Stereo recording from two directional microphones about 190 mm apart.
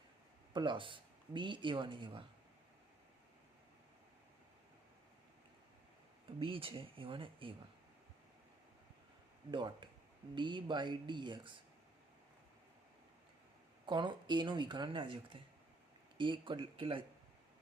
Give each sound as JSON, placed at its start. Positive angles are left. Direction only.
{"t": 0.5, "sound": "speech", "side_deg": -25}
{"t": 6.2, "sound": "speech", "side_deg": -25}
{"t": 9.5, "sound": "speech", "side_deg": -25}
{"t": 13.8, "sound": "speech", "side_deg": -25}